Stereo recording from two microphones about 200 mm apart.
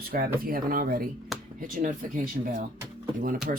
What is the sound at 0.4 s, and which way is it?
Speech, 45° right (ahead or behind).